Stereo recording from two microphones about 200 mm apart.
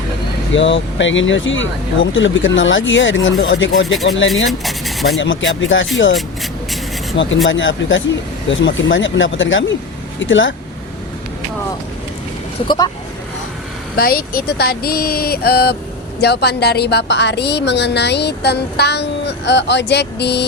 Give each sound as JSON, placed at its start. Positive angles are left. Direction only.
{"t": 0.5, "sound": "speech", "side_deg": 65}
{"t": 3.8, "sound": "speech", "side_deg": 0}
{"t": 4.4, "sound": "a sound", "side_deg": 0}
{"t": 5.1, "sound": "speech", "side_deg": 70}
{"t": 7.4, "sound": "speech", "side_deg": 70}
{"t": 12.6, "sound": "speech", "side_deg": 20}
{"t": 13.9, "sound": "a woman's voice", "side_deg": 50}